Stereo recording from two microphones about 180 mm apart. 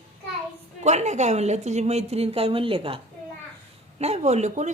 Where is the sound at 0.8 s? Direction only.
40° right (ahead or behind).